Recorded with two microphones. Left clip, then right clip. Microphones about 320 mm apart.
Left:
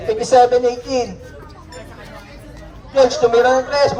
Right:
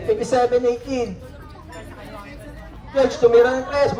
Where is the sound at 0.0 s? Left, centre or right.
Left.